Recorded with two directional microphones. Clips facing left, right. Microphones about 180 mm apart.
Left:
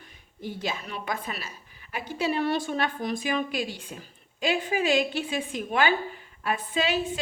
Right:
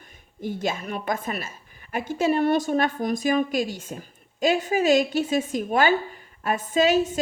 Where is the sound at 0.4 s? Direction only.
45° right (ahead or behind).